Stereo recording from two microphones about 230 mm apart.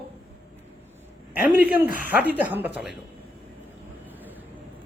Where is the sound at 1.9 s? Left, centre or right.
Right.